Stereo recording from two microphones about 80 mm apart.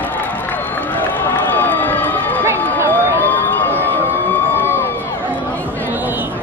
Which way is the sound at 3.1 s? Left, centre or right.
Left.